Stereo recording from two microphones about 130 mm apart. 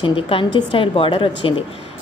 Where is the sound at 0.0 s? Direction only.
45° left (ahead or behind).